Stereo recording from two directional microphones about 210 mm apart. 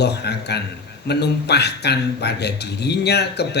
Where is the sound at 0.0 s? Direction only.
50° left (ahead or behind).